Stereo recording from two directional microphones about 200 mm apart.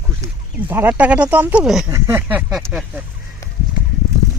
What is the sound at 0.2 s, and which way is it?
Speech, 10° right (ahead or behind).